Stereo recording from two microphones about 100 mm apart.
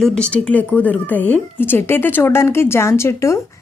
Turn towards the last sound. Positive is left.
turn(degrees=30)  # may be behind; listen again after turning